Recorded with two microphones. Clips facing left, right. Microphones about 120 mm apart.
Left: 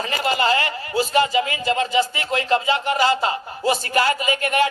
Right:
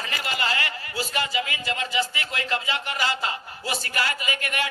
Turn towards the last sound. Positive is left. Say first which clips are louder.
# left 9 dB
turn(degrees=30)  # may be behind; listen again after turning